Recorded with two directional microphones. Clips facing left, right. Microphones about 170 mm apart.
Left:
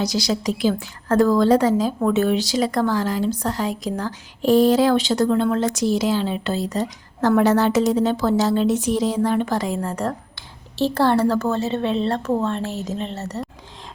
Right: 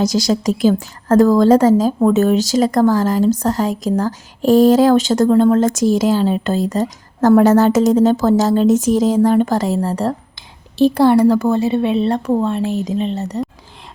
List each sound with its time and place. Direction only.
0.0 s a woman's voice: 45° right (ahead or behind); by 10.2 s 30° right (ahead or behind)
10.3 s a woman's voice: 15° right (ahead or behind)